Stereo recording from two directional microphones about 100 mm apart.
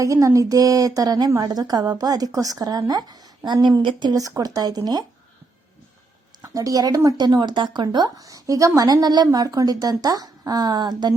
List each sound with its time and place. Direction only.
0.0 s speech: 35° right (ahead or behind)
6.4 s speech: 35° right (ahead or behind)